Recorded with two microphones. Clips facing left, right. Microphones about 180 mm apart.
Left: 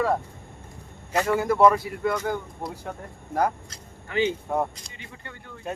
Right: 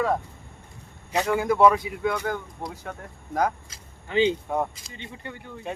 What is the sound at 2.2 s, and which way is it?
Speech, 5° left (ahead or behind).